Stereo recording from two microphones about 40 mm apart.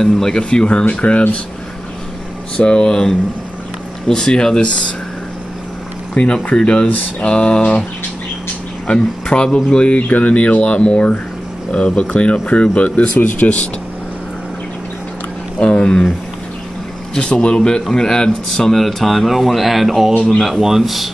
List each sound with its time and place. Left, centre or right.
0.0 s speech: centre
2.5 s speech: left
6.1 s speech: left
8.8 s speech: left
10.0 s speech: left
15.6 s speech: left
17.2 s speech: left
18.8 s speech: centre